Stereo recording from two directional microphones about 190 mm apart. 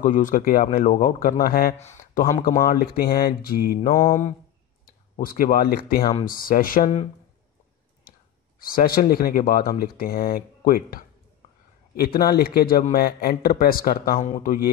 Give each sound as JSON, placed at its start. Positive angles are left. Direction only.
{"t": 0.0, "sound": "speech", "side_deg": 45}
{"t": 1.8, "sound": "speech", "side_deg": 40}
{"t": 8.5, "sound": "speech", "side_deg": 50}